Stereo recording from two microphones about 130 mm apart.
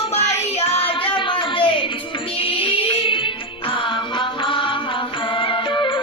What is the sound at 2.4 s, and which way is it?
Music, 45° left (ahead or behind).